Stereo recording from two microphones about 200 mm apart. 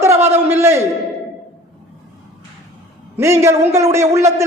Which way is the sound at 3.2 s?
15° right (ahead or behind).